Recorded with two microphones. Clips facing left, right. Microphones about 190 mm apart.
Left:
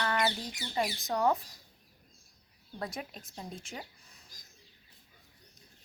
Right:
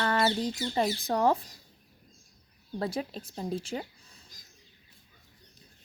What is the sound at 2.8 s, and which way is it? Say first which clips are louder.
Speech: right 7 dB; 30° right (ahead or behind).